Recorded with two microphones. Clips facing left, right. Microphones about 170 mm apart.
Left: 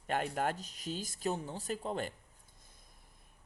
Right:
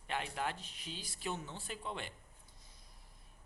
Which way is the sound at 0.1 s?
45° left (ahead or behind).